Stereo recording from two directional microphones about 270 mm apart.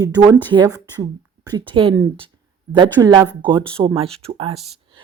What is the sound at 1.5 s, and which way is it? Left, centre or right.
A woman's voice, centre.